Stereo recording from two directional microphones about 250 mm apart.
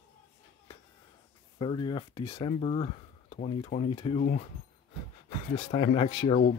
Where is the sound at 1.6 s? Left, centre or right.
Centre.